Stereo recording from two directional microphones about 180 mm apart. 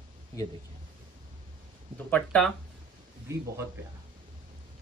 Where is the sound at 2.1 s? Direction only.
5° left (ahead or behind).